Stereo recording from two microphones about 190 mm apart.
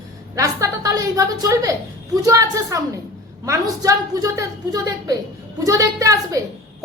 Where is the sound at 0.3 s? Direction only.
15° right (ahead or behind).